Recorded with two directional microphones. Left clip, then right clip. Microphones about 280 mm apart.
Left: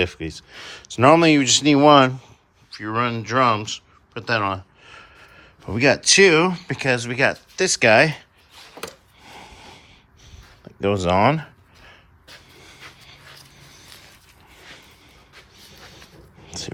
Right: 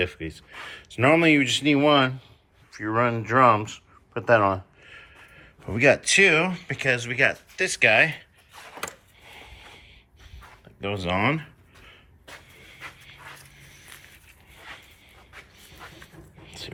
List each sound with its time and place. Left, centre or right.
0.0 s speech: centre
2.7 s speech: centre
4.8 s speech: centre
9.2 s snort: centre
10.8 s speech: centre
12.5 s dog: centre
13.6 s a sound: centre
16.5 s a sound: left